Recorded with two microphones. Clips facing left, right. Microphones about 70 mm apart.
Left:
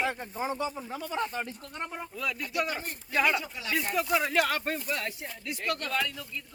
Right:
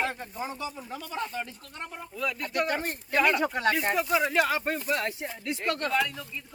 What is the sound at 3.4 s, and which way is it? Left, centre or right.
Speech, right.